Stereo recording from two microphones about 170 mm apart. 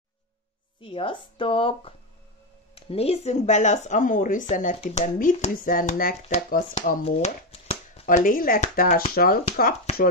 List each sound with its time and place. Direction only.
0.7 s speech: 30° left (ahead or behind); by 7.0 s 55° left (ahead or behind)
7.1 s speech: 40° left (ahead or behind); by 9.4 s 60° left (ahead or behind)